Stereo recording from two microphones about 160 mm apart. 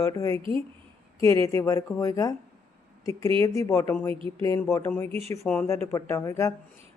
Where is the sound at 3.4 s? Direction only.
20° left (ahead or behind).